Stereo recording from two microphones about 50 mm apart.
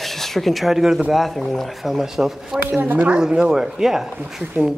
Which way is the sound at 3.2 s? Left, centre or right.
Centre.